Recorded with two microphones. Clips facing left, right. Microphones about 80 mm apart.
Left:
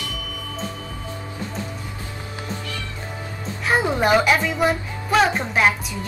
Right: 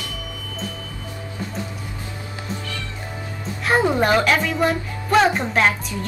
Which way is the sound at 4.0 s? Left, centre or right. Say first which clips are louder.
Even; centre.